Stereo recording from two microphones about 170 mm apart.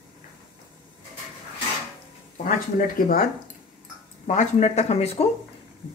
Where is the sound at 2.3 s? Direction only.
55° left (ahead or behind).